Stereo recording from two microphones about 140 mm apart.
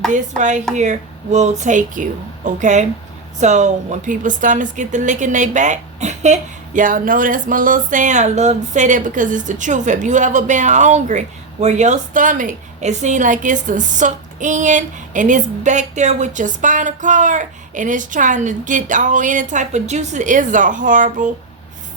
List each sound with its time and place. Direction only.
0.1 s a woman's voice: 60° right (ahead or behind)